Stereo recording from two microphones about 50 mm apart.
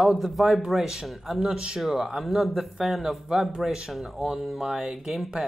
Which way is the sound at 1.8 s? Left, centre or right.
Centre.